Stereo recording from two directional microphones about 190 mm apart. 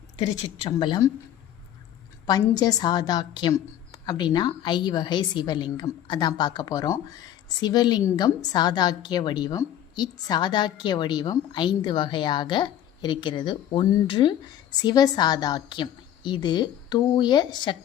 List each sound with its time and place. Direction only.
0.2 s a woman's voice: 25° left (ahead or behind)
2.6 s a woman's voice: 20° left (ahead or behind)